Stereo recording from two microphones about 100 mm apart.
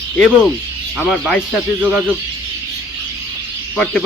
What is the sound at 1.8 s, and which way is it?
Speech, 15° right (ahead or behind).